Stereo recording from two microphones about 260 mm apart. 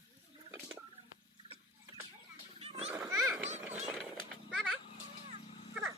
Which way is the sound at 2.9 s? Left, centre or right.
Centre.